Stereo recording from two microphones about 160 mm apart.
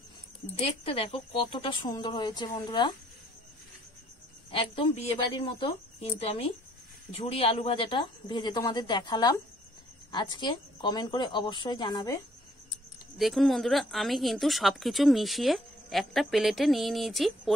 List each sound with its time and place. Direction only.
0.6 s speech: 35° left (ahead or behind)
4.5 s speech: 35° left (ahead or behind)
13.2 s speech: centre (ahead or behind)